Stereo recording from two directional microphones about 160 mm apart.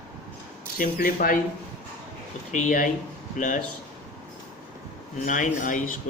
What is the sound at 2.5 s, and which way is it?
Speech, 55° left (ahead or behind).